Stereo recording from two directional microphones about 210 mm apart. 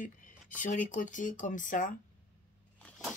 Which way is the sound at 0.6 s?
40° left (ahead or behind).